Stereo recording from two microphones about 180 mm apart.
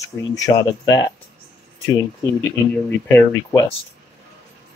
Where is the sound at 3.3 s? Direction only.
20° left (ahead or behind).